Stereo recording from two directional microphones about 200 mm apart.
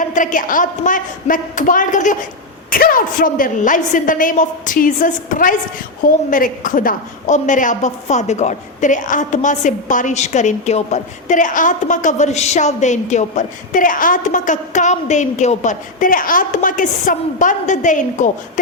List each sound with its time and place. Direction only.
0.0 s a woman's voice: 40° left (ahead or behind)